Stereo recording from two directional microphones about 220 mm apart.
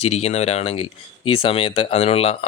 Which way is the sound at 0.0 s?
30° left (ahead or behind).